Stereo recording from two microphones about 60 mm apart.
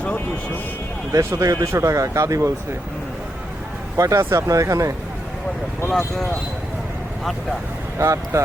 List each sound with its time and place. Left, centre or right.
1.2 s speech: right
3.9 s speech: right
7.9 s speech: right